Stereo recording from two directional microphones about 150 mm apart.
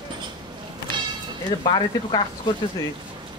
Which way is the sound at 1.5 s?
30° left (ahead or behind).